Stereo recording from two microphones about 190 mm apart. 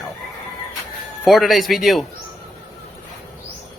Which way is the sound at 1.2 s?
Centre (ahead or behind).